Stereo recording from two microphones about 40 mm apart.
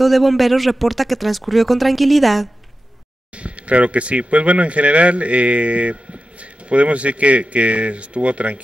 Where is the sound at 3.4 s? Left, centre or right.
Right.